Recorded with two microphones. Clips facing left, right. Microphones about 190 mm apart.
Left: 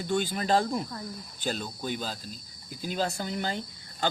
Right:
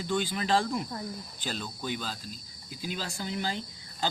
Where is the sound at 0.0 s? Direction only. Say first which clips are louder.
Left 2 dB; 45° left (ahead or behind).